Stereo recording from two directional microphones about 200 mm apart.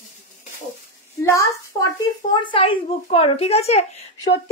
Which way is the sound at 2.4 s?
25° left (ahead or behind).